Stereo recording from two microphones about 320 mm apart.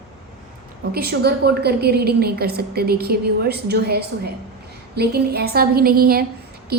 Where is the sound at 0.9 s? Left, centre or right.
Right.